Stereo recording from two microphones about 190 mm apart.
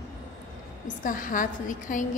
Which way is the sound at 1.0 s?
45° left (ahead or behind).